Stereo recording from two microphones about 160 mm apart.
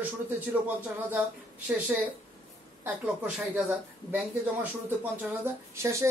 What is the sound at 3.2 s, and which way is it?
Speech, 10° right (ahead or behind).